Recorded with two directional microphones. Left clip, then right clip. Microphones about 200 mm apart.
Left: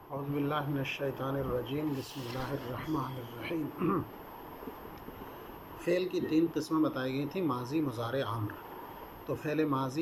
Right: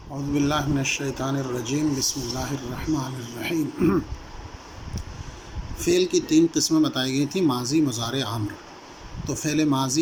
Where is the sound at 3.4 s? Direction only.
60° right (ahead or behind).